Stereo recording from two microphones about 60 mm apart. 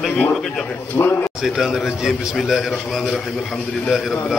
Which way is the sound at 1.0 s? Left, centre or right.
Left.